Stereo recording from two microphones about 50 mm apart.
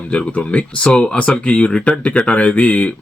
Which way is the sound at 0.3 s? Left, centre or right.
Left.